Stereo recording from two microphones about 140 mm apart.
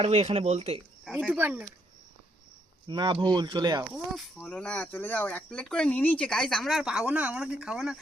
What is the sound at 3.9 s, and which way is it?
Speech, 5° right (ahead or behind).